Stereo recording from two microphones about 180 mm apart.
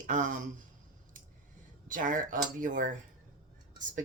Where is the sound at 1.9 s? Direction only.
45° right (ahead or behind).